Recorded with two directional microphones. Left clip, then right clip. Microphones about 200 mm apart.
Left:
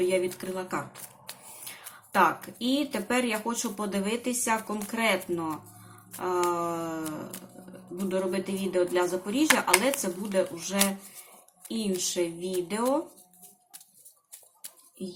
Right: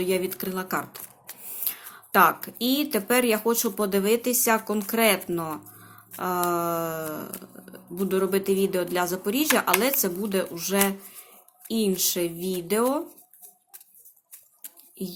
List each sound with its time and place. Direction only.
0.1 s speech: 50° right (ahead or behind)